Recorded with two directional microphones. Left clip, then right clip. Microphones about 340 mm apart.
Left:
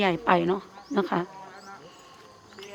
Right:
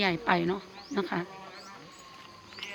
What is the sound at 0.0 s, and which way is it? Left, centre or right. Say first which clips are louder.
A woman's voice: left 4 dB; centre.